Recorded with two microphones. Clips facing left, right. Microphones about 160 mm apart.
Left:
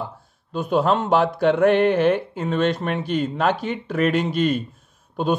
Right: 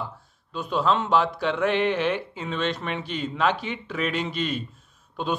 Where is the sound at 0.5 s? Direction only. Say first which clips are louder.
Left 4 dB; 50° left (ahead or behind).